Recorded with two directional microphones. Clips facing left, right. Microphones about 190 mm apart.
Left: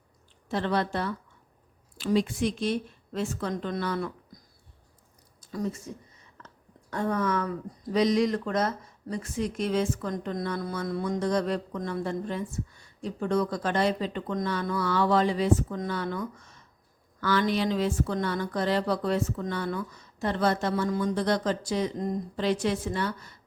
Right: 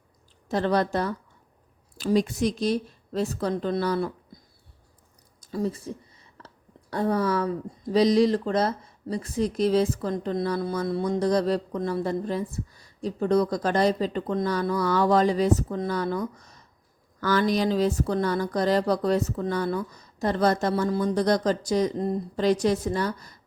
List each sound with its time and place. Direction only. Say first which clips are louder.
0.4 s speech: right 4 dB; 40° right (ahead or behind)
5.4 s a sound: right 4 dB; 30° right (ahead or behind)
6.9 s speech: right 3 dB; 35° right (ahead or behind)